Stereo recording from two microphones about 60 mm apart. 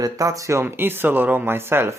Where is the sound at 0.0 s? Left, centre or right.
Right.